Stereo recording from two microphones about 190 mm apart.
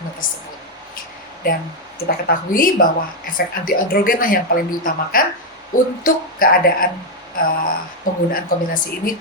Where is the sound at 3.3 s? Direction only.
50° left (ahead or behind).